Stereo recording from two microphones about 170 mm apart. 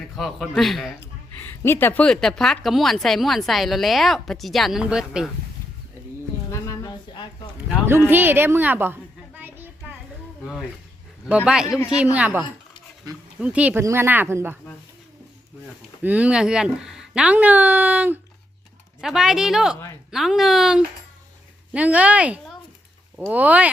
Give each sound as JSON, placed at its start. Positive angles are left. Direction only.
{"t": 0.2, "sound": "a woman's voice", "side_deg": 0}
{"t": 1.4, "sound": "a woman's voice", "side_deg": 10}
{"t": 6.5, "sound": "a sound", "side_deg": 20}
{"t": 7.9, "sound": "a child's voice", "side_deg": -15}
{"t": 11.3, "sound": "a woman's voice", "side_deg": -5}
{"t": 16.0, "sound": "a woman's voice", "side_deg": -10}
{"t": 19.7, "sound": "a woman's voice", "side_deg": 15}
{"t": 20.1, "sound": "a woman's voice", "side_deg": 0}